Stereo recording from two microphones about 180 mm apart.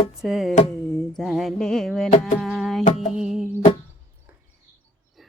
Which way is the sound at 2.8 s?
40° left (ahead or behind).